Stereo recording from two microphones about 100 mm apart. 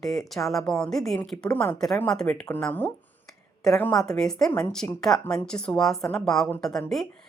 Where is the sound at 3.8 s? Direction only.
5° left (ahead or behind).